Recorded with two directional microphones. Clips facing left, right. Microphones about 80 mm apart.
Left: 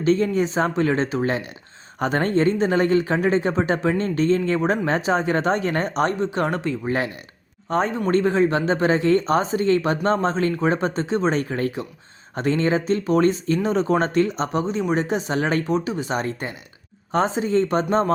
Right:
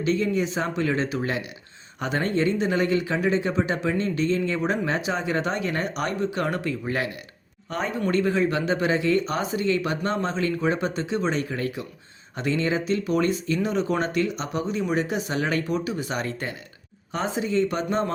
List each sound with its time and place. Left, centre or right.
0.0 s speech: left
17.1 s speech: left